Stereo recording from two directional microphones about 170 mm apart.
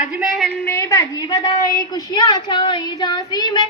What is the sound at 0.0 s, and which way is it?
Speech, 5° right (ahead or behind).